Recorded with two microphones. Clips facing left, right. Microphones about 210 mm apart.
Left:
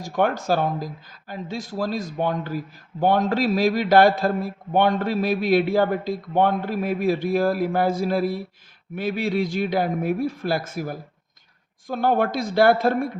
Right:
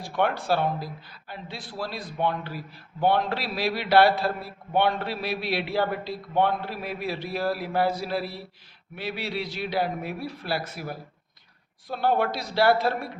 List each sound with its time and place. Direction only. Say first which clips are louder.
0.0 s speech: left 4 dB; 45° left (ahead or behind)